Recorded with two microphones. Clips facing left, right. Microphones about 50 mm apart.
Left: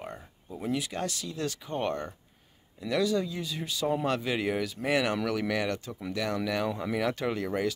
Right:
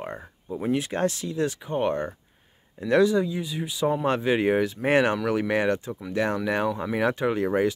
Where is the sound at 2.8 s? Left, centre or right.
Right.